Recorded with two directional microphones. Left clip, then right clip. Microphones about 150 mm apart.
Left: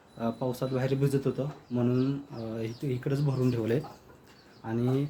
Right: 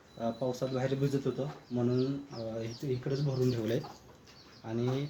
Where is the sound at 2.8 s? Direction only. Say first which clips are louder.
Even; 35° left (ahead or behind).